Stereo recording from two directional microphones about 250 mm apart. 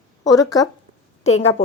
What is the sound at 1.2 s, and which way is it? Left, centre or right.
Speech, left.